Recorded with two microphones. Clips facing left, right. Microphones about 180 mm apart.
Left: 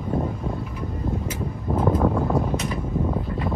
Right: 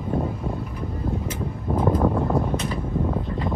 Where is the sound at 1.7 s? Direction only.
5° left (ahead or behind).